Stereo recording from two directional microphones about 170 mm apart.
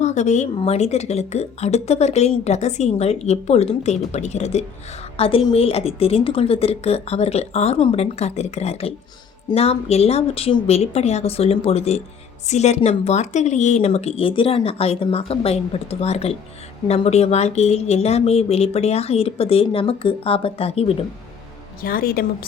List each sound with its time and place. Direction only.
0.0 s a woman's voice: 45° left (ahead or behind)
21.8 s a woman's voice: 60° left (ahead or behind)